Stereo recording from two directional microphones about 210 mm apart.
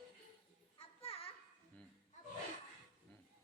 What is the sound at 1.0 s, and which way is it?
Children playing, 25° left (ahead or behind).